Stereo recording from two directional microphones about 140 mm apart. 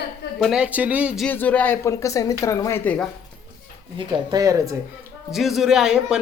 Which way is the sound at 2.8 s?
10° left (ahead or behind).